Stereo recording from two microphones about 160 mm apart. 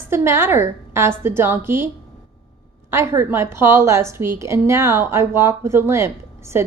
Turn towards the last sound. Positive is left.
turn(degrees=-15)  # may be behind; listen again after turning